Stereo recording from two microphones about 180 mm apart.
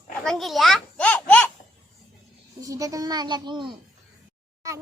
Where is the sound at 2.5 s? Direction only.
20° right (ahead or behind).